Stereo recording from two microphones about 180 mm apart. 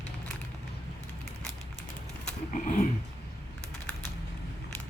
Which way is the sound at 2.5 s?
45° left (ahead or behind).